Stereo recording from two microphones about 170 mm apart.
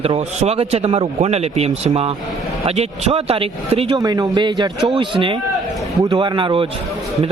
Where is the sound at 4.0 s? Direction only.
25° right (ahead or behind).